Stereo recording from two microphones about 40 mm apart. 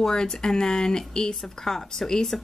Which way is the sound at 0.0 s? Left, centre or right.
Centre.